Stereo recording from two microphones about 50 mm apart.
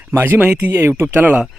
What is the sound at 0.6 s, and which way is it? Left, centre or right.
Speech, right.